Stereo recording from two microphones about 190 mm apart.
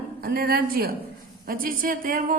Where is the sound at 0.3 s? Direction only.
50° right (ahead or behind).